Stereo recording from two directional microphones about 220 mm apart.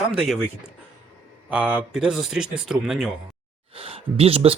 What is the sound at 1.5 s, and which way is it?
Speech, 5° right (ahead or behind).